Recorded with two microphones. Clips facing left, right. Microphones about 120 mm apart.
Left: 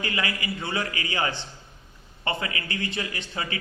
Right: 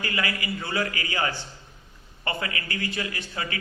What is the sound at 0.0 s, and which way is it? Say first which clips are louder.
A man's voice: even; 25° left (ahead or behind).